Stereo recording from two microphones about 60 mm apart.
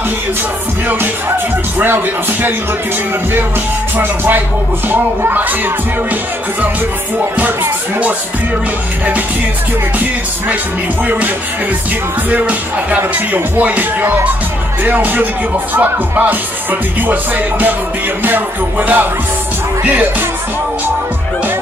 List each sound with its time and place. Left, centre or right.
4.0 s music: right
11.1 s speech: right
14.8 s music: right